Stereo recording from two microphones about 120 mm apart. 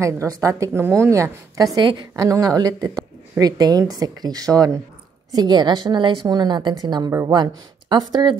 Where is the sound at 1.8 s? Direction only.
40° right (ahead or behind).